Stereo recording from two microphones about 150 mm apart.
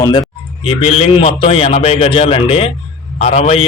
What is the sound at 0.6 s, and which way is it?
A man's voice, 40° left (ahead or behind).